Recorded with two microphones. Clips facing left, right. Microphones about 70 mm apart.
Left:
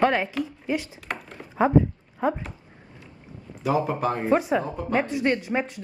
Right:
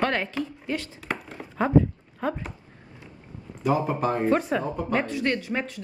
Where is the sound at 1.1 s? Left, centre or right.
Centre.